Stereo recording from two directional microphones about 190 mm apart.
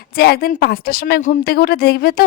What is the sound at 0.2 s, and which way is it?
A woman's voice, 55° left (ahead or behind).